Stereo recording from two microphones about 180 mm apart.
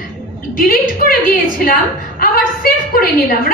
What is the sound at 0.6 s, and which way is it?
A woman's voice, 50° left (ahead or behind).